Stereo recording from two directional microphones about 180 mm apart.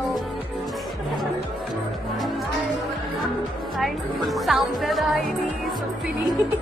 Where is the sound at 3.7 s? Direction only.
Centre (ahead or behind).